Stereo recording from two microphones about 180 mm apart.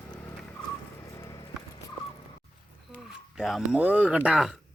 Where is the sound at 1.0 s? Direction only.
15° left (ahead or behind).